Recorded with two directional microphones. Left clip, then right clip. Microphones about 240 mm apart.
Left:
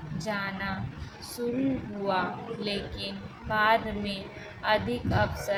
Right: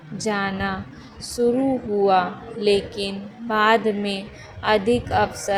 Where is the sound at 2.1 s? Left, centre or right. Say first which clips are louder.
Right 7 dB; right.